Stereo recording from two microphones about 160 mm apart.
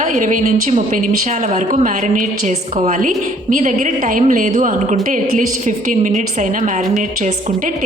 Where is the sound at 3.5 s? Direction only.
50° right (ahead or behind).